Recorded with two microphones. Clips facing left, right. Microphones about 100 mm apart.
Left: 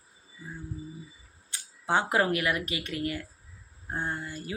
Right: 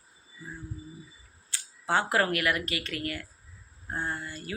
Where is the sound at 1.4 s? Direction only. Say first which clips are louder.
Left 1 dB; 15° left (ahead or behind).